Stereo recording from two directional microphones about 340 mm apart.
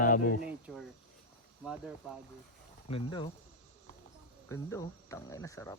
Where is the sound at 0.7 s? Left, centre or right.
Centre.